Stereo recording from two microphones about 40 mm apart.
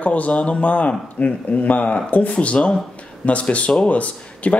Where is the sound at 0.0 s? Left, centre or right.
Left.